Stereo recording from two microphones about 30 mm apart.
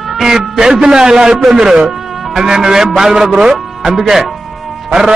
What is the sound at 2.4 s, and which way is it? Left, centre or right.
A man's voice, right.